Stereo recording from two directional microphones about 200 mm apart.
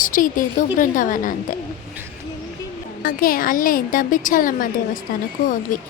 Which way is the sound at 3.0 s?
45° left (ahead or behind).